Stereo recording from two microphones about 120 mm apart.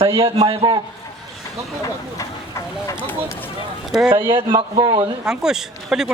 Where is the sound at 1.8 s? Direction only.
25° left (ahead or behind).